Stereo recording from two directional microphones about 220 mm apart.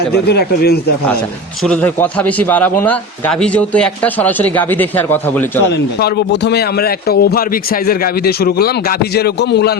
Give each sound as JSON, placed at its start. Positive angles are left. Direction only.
{"t": 0.1, "sound": "a man's voice", "side_deg": 45}
{"t": 1.6, "sound": "a man's voice", "side_deg": 5}
{"t": 5.7, "sound": "a man's voice", "side_deg": 45}